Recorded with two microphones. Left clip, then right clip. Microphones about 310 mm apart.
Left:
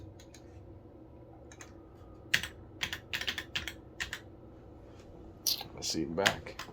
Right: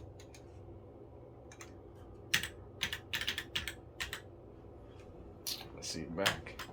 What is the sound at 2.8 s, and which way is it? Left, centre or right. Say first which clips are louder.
Typing: left 1 dB; centre.